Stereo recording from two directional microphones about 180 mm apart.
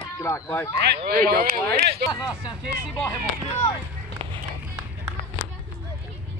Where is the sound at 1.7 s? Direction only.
60° right (ahead or behind).